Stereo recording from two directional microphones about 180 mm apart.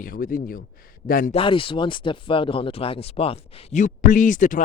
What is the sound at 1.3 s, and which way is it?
Speech, 30° left (ahead or behind).